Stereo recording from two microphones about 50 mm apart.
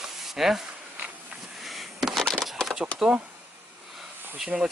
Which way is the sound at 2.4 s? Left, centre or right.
Centre.